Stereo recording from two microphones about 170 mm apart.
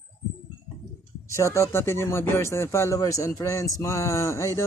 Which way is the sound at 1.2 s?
15° left (ahead or behind).